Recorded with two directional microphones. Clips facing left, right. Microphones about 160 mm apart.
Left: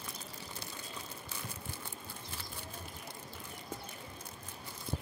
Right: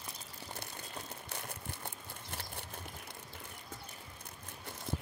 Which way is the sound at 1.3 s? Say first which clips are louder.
Right 1 dB; 65° right (ahead or behind).